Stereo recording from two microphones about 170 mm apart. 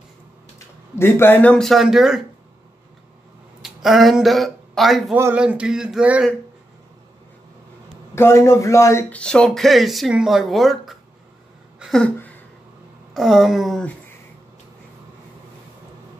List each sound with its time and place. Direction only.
0.9 s speech: 15° left (ahead or behind); by 2.2 s 5° right (ahead or behind)
3.6 s speech: centre (ahead or behind)
8.1 s speech: 15° left (ahead or behind)
9.2 s speech: 5° left (ahead or behind)
11.8 s a sound: 5° left (ahead or behind)
13.1 s speech: centre (ahead or behind)